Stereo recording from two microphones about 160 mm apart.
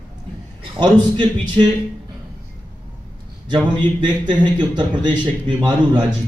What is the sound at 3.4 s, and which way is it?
A man's voice, 30° right (ahead or behind).